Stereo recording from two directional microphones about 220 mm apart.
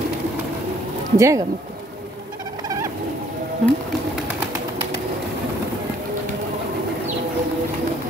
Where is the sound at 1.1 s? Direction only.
15° right (ahead or behind).